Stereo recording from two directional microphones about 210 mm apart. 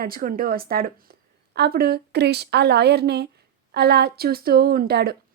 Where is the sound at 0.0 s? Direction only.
45° right (ahead or behind).